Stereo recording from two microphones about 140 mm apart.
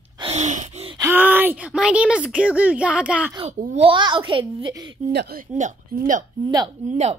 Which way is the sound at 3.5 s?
60° right (ahead or behind).